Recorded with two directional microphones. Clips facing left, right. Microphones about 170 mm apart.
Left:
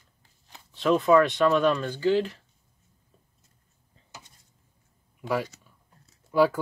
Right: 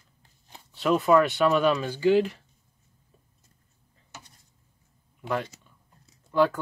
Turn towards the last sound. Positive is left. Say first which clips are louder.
# left 1 dB
turn(degrees=10)  # may be behind; listen again after turning